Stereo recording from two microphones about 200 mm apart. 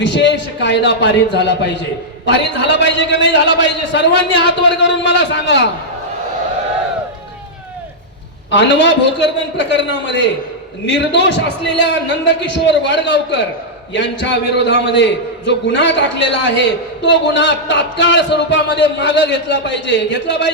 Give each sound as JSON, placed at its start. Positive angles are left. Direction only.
{"t": 0.0, "sound": "a man's voice", "side_deg": 60}
{"t": 8.4, "sound": "a man's voice", "side_deg": 60}